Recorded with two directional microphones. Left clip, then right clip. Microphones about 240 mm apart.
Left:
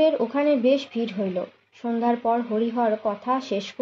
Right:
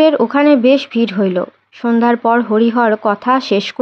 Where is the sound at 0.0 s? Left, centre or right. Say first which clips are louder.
Right 10 dB; right.